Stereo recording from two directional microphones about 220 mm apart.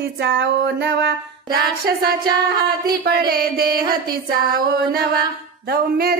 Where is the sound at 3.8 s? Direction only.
20° right (ahead or behind).